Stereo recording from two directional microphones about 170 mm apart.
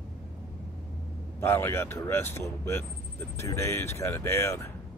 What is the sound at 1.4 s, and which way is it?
Speech, 15° left (ahead or behind).